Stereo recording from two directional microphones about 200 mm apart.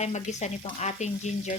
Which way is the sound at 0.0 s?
35° left (ahead or behind).